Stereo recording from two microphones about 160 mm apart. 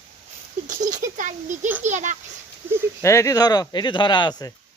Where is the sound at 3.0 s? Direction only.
20° left (ahead or behind).